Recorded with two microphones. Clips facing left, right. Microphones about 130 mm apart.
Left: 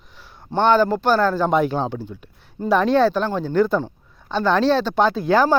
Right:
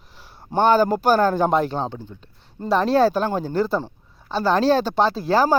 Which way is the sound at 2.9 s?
45° right (ahead or behind).